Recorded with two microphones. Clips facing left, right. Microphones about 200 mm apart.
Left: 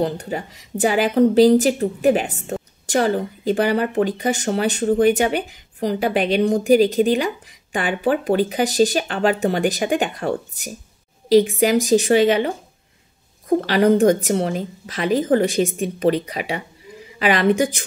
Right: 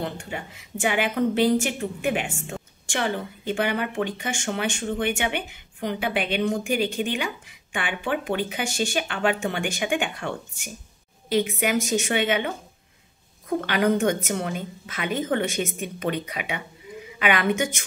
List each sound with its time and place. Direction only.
0.0 s a woman's voice: 40° left (ahead or behind)